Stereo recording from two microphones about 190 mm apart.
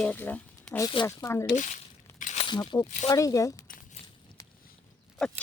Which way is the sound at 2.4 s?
25° left (ahead or behind).